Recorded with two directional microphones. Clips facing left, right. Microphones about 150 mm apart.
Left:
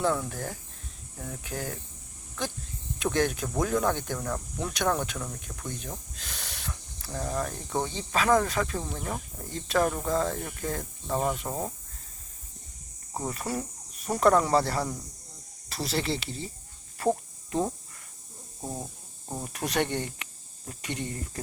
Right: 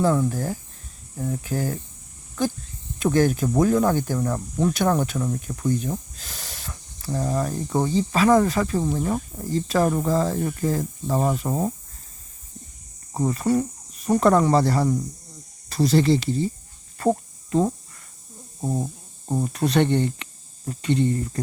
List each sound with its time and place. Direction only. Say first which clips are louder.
0.0 s speech: right 7 dB; 5° right (ahead or behind)
3.0 s speech: right 7 dB; 5° right (ahead or behind)
11.4 s speech: right 8 dB; 15° right (ahead or behind)
13.1 s speech: right 10 dB; centre (ahead or behind)
18.6 s speech: right 10 dB; 15° right (ahead or behind)
19.5 s speech: right 8 dB; 10° left (ahead or behind)